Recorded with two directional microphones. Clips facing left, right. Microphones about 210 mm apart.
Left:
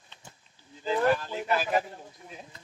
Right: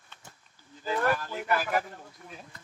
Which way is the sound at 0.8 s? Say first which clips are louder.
Left 3 dB; 20° left (ahead or behind).